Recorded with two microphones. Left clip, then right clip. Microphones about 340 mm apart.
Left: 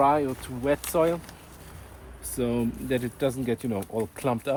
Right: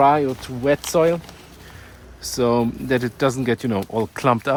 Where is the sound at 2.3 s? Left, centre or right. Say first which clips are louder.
Right 9 dB; centre.